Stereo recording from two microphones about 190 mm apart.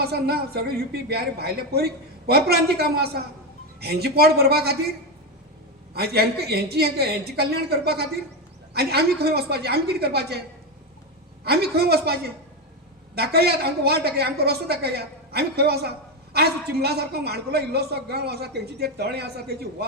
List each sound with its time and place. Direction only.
0.0 s a man's voice: 55° right (ahead or behind)
5.9 s a man's voice: 55° right (ahead or behind)
11.4 s a man's voice: 55° right (ahead or behind)
13.1 s a man's voice: 55° right (ahead or behind)